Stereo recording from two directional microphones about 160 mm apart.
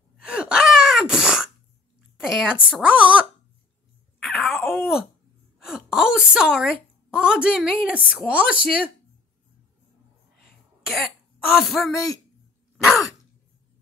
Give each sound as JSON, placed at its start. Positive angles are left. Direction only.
{"t": 0.2, "sound": "gasp", "side_deg": -5}
{"t": 2.1, "sound": "speech", "side_deg": -5}
{"t": 4.2, "sound": "a sound", "side_deg": 0}
{"t": 5.6, "sound": "a woman's voice", "side_deg": -5}
{"t": 10.9, "sound": "speech", "side_deg": 0}
{"t": 11.9, "sound": "speech", "side_deg": 20}
{"t": 12.7, "sound": "sigh", "side_deg": 0}